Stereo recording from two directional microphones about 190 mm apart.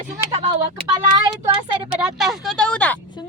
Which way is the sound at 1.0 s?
20° right (ahead or behind).